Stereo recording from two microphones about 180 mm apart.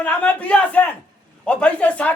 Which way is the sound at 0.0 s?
10° left (ahead or behind).